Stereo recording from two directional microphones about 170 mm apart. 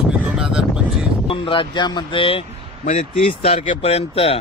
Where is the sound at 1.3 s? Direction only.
30° left (ahead or behind).